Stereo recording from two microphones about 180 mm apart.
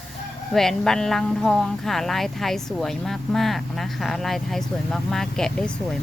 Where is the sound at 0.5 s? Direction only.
Centre (ahead or behind).